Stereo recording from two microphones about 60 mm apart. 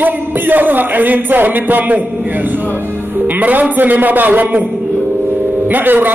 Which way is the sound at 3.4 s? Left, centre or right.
Right.